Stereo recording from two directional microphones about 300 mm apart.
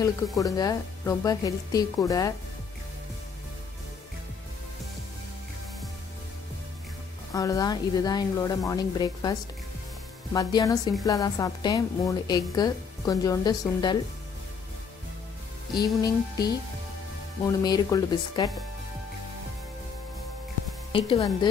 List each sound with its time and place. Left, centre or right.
0.4 s a woman's voice: centre
7.3 s a woman's voice: centre
15.7 s a woman's voice: centre
20.9 s a woman's voice: centre